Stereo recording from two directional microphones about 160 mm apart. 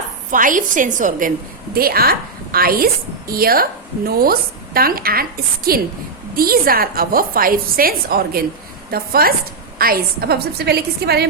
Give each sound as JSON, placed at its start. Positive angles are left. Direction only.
{"t": 0.3, "sound": "a woman's voice", "side_deg": -55}
{"t": 1.7, "sound": "a woman's voice", "side_deg": -70}